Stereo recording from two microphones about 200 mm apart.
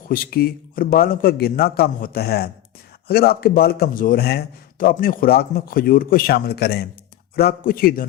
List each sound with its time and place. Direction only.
0.1 s a man's voice: 45° left (ahead or behind)